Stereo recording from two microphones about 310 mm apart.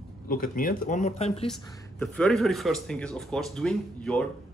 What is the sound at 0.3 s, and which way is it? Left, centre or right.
Speech, left.